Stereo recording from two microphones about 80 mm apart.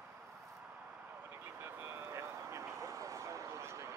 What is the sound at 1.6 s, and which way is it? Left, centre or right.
Vehicle, right.